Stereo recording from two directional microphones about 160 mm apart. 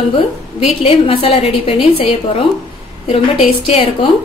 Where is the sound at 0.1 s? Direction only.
40° left (ahead or behind).